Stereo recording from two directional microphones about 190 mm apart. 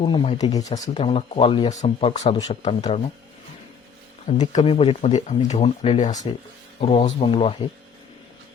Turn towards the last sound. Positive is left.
turn(degrees=30)  # may be behind; listen again after turning